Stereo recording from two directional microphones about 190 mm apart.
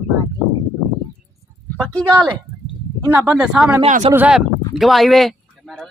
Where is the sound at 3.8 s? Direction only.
35° right (ahead or behind).